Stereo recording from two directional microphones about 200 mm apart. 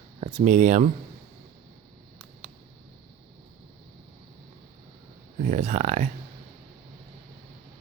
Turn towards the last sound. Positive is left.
turn(degrees=-40)  # may be behind; listen again after turning